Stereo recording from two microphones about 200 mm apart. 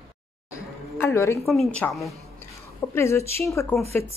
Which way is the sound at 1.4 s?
5° left (ahead or behind).